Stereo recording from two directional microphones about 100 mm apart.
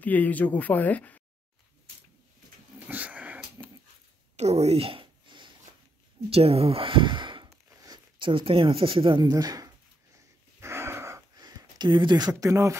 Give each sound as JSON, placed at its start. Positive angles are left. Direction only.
{"t": 0.0, "sound": "speech", "side_deg": 15}
{"t": 2.9, "sound": "dog", "side_deg": -15}
{"t": 3.6, "sound": "dog", "side_deg": -35}
{"t": 4.4, "sound": "speech", "side_deg": -90}
{"t": 6.3, "sound": "speech", "side_deg": -80}
{"t": 9.2, "sound": "speech", "side_deg": -40}
{"t": 10.6, "sound": "a sound", "side_deg": -25}
{"t": 11.3, "sound": "speech", "side_deg": -45}